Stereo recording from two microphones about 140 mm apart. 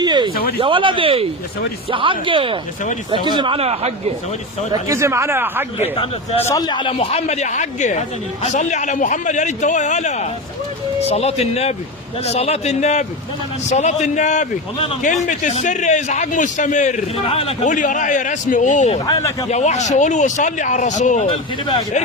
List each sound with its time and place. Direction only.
0.0 s a sound: 30° right (ahead or behind)
0.6 s speech: 35° right (ahead or behind)
4.7 s a man's voice: 20° right (ahead or behind)
5.8 s a man's voice: 45° left (ahead or behind)
6.4 s a man's voice: 30° left (ahead or behind); by 17.0 s 60° left (ahead or behind)
17.2 s a man's voice: 45° left (ahead or behind)
17.7 s speech: 65° left (ahead or behind)
19.0 s speech: 25° left (ahead or behind)
19.5 s speech: 55° left (ahead or behind)
21.2 s speech: 35° left (ahead or behind)